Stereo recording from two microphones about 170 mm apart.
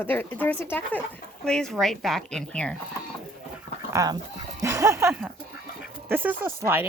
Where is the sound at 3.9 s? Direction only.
20° right (ahead or behind).